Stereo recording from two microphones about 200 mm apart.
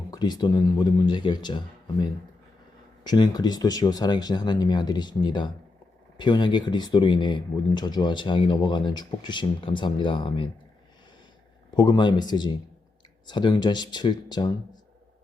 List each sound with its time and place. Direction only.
0.1 s speech: 20° left (ahead or behind)
11.7 s speech: 20° left (ahead or behind)